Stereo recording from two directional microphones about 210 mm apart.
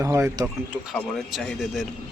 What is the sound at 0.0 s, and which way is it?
Speech, 15° right (ahead or behind).